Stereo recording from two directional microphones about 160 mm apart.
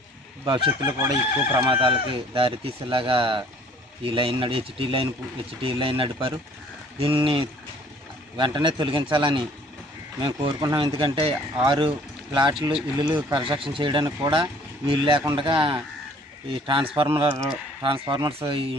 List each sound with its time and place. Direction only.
0.8 s a man's voice: 20° right (ahead or behind)